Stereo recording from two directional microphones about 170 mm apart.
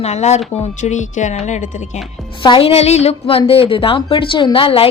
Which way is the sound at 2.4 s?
30° left (ahead or behind).